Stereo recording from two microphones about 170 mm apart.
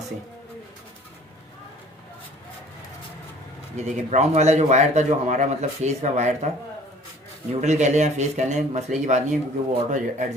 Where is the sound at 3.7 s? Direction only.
45° right (ahead or behind).